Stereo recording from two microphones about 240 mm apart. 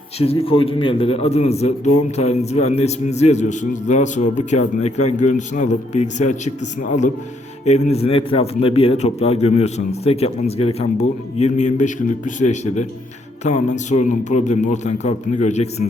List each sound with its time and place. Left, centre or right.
0.2 s a man's voice: left